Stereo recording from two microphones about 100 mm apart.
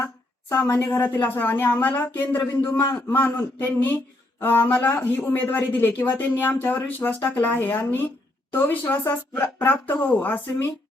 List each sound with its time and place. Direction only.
0.0 s speech: 20° left (ahead or behind)